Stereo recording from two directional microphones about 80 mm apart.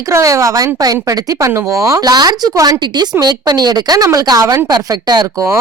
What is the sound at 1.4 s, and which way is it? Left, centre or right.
Speech, right.